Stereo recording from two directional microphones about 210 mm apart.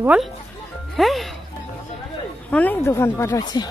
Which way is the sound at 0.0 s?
5° right (ahead or behind).